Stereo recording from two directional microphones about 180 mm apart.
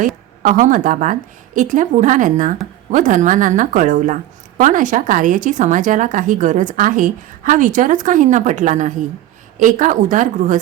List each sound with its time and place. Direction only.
0.4 s a woman's voice: 45° right (ahead or behind)